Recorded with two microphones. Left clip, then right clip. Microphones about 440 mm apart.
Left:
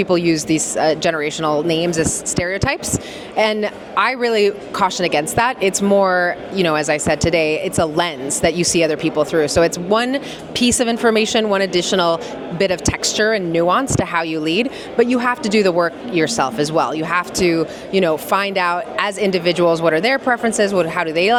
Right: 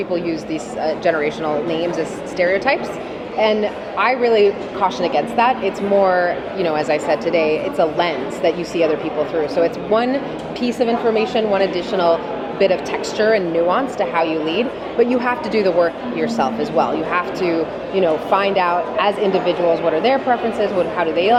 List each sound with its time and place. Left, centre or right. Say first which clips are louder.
0.0 s a woman's voice: left 5 dB; left
10.6 s a woman's voice: left 2 dB; left